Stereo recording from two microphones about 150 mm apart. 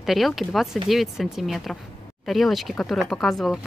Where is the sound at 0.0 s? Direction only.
Centre (ahead or behind).